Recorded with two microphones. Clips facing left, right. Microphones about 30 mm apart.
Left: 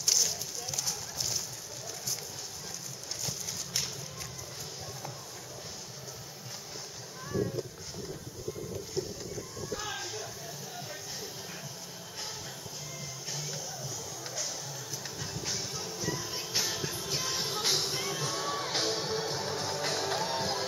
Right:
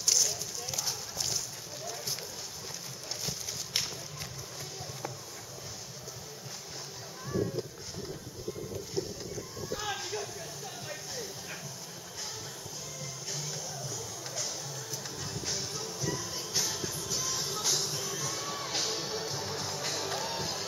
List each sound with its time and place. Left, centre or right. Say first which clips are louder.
0.0 s a sound: even; centre
9.3 s a sound: even; centre
13.0 s music: right 1 dB; centre
17.2 s music: left 2 dB; left
18.3 s music: left 3 dB; centre
19.3 s music: left 2 dB; left
20.0 s music: left 3 dB; left